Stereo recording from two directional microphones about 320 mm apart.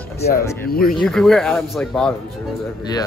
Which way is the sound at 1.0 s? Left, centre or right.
Centre.